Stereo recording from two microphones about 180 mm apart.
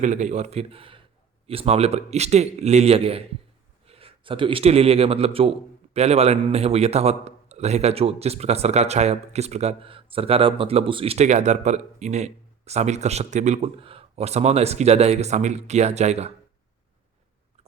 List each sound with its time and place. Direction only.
0.0 s a man's voice: 40° right (ahead or behind)